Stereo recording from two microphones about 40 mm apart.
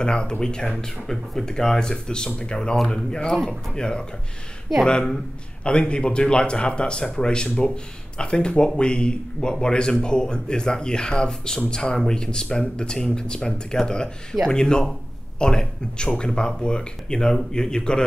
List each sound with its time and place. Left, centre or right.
0.0 s speech: left
5.6 s speech: left